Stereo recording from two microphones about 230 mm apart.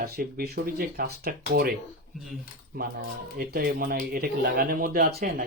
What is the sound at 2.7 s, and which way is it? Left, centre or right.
Speech, right.